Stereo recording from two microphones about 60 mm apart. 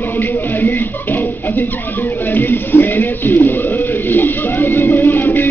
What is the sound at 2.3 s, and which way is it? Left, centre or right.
Speech, left.